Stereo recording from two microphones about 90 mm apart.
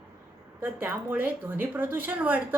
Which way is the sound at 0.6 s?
20° right (ahead or behind).